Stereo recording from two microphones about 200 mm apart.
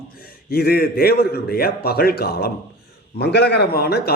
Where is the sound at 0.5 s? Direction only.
50° left (ahead or behind).